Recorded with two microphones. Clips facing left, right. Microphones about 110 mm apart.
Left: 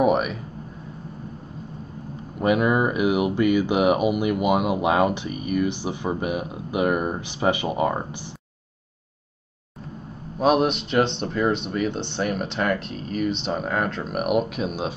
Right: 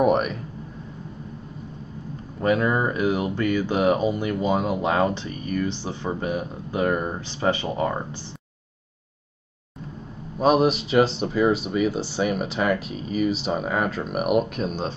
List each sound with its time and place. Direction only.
0.0 s speech: 5° left (ahead or behind)
2.4 s speech: 15° left (ahead or behind)
10.4 s speech: centre (ahead or behind)